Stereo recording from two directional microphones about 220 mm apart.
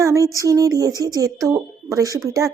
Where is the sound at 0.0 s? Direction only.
15° right (ahead or behind).